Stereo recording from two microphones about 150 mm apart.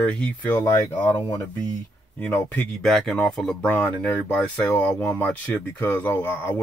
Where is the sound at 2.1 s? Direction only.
10° left (ahead or behind).